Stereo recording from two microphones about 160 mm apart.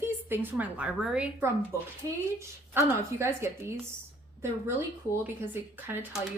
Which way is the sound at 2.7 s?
15° right (ahead or behind).